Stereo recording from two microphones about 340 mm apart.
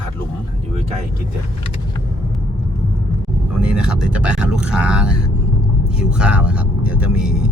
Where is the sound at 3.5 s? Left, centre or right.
Centre.